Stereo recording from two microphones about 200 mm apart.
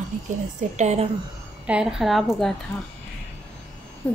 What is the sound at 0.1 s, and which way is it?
Speech, 40° right (ahead or behind).